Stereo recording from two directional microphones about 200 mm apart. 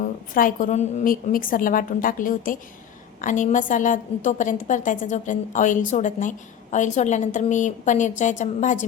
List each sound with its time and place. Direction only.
0.0 s a woman's voice: 45° left (ahead or behind)